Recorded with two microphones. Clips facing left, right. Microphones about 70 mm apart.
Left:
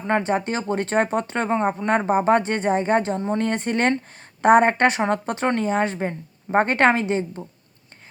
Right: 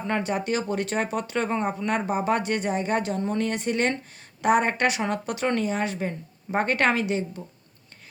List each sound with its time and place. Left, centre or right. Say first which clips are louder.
0.1 s speech: left 5 dB; left